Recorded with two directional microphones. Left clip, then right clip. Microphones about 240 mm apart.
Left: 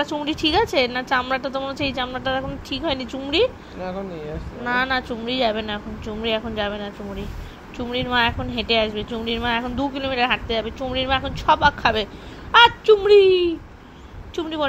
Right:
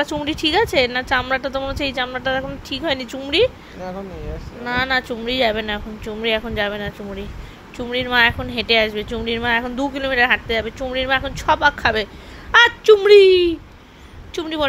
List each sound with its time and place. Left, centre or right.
0.0 s a woman's voice: right
4.6 s a woman's voice: right